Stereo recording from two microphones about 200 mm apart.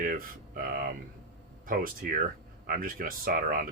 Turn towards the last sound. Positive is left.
turn(degrees=-45)  # may be behind; listen again after turning